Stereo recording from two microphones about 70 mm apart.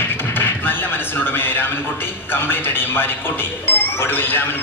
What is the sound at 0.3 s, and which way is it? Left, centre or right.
Music, left.